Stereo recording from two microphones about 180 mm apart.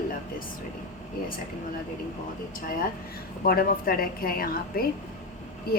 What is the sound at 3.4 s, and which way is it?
A woman's voice, 55° left (ahead or behind).